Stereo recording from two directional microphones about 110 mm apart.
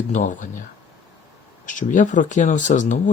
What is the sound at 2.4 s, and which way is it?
Speech, 90° left.